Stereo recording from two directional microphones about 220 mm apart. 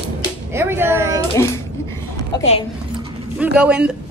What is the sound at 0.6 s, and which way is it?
Speech, 10° right (ahead or behind).